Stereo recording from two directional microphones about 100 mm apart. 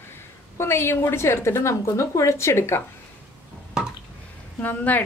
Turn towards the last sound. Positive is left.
turn(degrees=15)  # may be behind; listen again after turning